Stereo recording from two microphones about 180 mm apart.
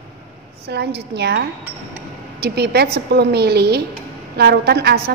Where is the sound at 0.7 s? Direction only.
70° right (ahead or behind).